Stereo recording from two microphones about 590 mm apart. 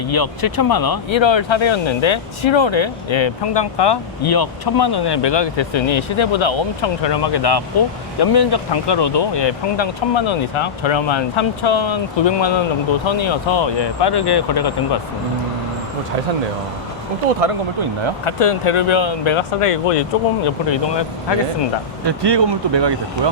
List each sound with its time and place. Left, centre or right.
0.1 s speech: left
18.3 s speech: left
22.0 s speech: right